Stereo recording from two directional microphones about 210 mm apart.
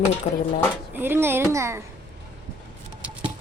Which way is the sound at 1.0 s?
10° right (ahead or behind).